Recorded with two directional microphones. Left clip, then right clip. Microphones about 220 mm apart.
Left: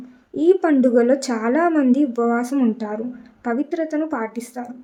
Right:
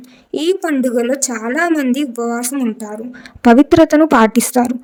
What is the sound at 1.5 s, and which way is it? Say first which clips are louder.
Speech: right 2 dB; 40° right (ahead or behind).